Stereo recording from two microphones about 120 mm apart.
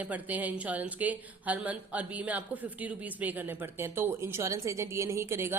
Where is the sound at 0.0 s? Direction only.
10° right (ahead or behind).